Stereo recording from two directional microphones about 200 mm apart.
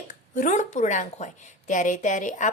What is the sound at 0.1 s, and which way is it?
A woman's voice, 40° left (ahead or behind).